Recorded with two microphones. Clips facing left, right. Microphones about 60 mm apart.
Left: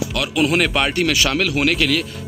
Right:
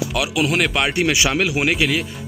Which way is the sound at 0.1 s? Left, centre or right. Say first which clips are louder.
Left 3 dB; centre.